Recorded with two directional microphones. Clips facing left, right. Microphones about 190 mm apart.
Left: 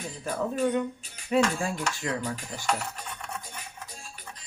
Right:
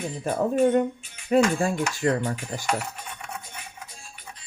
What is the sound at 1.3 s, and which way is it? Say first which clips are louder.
Speech: right 5 dB; 50° right (ahead or behind).